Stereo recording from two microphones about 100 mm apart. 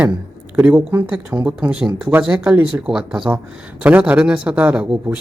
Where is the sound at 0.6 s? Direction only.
15° right (ahead or behind).